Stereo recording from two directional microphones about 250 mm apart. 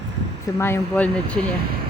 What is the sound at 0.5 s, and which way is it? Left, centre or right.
Speech, centre.